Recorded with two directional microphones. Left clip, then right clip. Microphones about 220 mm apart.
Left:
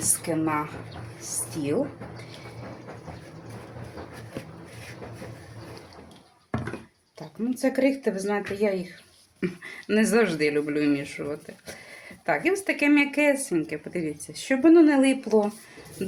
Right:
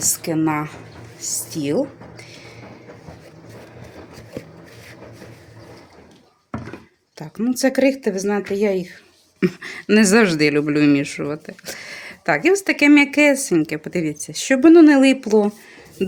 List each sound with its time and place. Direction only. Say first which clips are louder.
0.0 s speech: right 7 dB; 55° right (ahead or behind)
7.2 s speech: right 8 dB; 50° right (ahead or behind)